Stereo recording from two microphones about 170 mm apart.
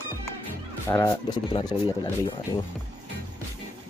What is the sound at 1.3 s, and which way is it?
Speech, 25° left (ahead or behind).